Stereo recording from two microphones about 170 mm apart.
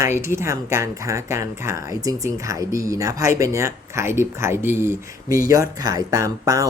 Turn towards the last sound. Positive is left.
turn(degrees=-20)  # may be behind; listen again after turning